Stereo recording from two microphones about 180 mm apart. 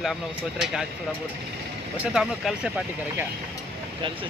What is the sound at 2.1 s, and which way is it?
Speech, 5° right (ahead or behind).